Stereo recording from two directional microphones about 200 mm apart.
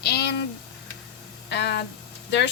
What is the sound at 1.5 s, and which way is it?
Speech, 60° left (ahead or behind).